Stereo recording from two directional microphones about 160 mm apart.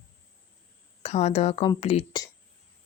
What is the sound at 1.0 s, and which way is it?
Speech, 45° left (ahead or behind).